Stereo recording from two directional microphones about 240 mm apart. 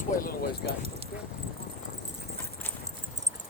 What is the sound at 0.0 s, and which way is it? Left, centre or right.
Speech, left.